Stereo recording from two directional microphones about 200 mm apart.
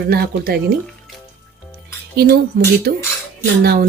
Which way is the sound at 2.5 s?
45° right (ahead or behind).